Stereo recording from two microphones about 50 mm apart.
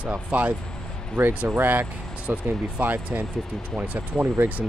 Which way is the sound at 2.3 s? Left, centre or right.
Right.